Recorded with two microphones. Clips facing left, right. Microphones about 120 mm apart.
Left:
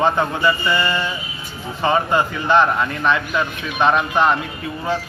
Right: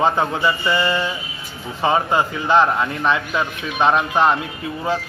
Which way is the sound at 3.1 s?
20° right (ahead or behind).